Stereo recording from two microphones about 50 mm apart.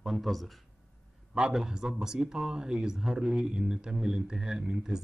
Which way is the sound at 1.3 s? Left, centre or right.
Centre.